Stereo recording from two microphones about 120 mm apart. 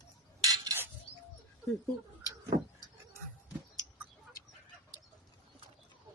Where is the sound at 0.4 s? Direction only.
30° right (ahead or behind).